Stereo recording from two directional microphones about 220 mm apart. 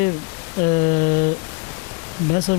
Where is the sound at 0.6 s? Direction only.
20° left (ahead or behind).